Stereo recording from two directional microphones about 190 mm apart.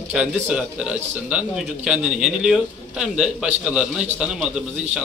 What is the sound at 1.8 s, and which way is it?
A man's voice, 5° right (ahead or behind).